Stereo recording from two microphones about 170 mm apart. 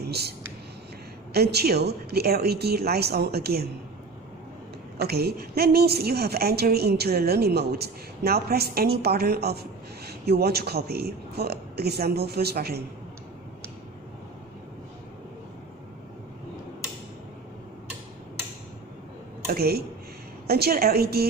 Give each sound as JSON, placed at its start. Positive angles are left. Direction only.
{"t": 0.1, "sound": "a woman's voice", "side_deg": -70}
{"t": 4.9, "sound": "a woman's voice", "side_deg": -70}
{"t": 19.5, "sound": "a woman's voice", "side_deg": -65}